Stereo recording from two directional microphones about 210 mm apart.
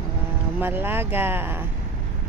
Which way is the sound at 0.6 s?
10° right (ahead or behind).